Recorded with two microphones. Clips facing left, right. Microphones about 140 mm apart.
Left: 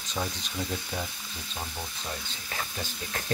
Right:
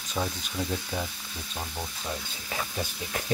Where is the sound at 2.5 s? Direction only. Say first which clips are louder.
Right 3 dB; 15° right (ahead or behind).